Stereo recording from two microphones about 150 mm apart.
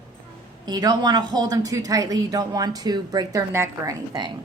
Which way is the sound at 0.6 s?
25° right (ahead or behind).